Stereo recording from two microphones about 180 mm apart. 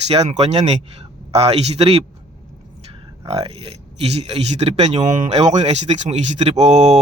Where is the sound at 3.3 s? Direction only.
30° right (ahead or behind).